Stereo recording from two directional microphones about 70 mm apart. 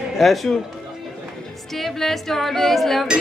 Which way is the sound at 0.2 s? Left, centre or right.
Centre.